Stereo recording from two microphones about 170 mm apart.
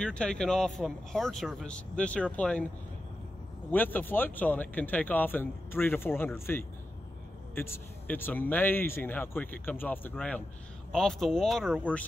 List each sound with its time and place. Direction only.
0.0 s speech: 5° left (ahead or behind)
3.7 s speech: 10° left (ahead or behind)